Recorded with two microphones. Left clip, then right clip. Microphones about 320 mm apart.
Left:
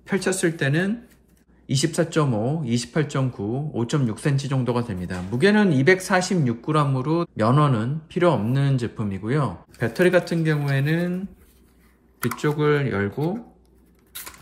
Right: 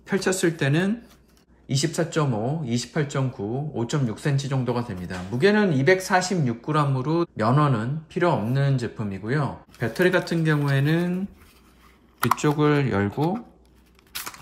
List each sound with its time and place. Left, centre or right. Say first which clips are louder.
0.0 s speech: even; centre
12.4 s speech: left 4 dB; centre